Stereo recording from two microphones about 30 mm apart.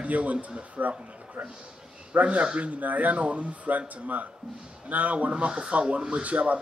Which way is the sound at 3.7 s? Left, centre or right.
Right.